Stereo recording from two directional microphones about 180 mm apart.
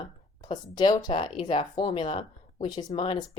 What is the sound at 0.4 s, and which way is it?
A woman's voice, 25° left (ahead or behind).